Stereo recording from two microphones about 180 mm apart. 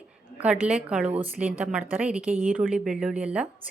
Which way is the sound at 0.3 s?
5° right (ahead or behind).